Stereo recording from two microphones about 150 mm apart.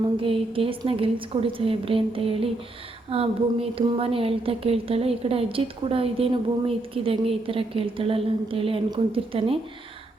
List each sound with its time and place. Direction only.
0.2 s a woman's voice: 35° right (ahead or behind)